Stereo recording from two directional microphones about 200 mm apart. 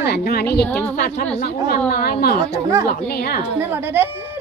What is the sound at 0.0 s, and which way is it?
Speech, 50° left (ahead or behind).